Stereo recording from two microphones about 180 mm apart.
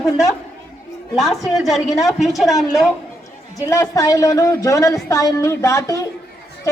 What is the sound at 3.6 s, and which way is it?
Speech, 20° left (ahead or behind).